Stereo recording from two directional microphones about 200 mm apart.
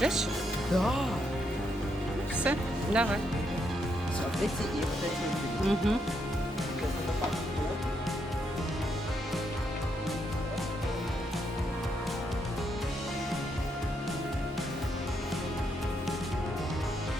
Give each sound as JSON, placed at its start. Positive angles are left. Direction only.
{"t": 0.0, "sound": "speech", "side_deg": 0}
{"t": 0.7, "sound": "music", "side_deg": 0}
{"t": 2.4, "sound": "speech", "side_deg": -5}
{"t": 5.6, "sound": "music", "side_deg": 0}